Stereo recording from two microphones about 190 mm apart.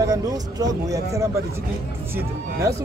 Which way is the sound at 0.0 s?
20° right (ahead or behind).